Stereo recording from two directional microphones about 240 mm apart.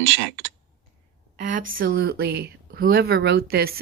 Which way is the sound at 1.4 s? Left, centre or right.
Right.